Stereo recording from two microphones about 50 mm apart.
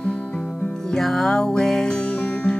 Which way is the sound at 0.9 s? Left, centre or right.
Centre.